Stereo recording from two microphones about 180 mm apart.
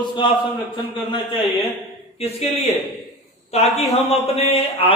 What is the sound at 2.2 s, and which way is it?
A man's voice, 35° left (ahead or behind).